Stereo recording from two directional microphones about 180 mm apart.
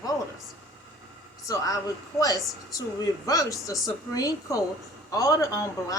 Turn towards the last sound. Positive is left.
turn(degrees=15)  # may be behind; listen again after turning